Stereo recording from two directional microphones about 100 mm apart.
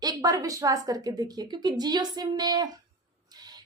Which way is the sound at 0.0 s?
40° right (ahead or behind).